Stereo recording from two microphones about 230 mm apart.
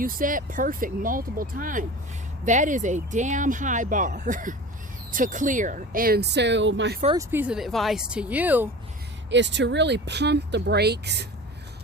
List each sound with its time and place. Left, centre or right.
0.0 s speech: right
7.2 s speech: centre
9.3 s speech: right